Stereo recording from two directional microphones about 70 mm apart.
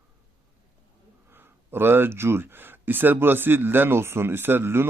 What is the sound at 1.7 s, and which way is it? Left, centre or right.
Speech, right.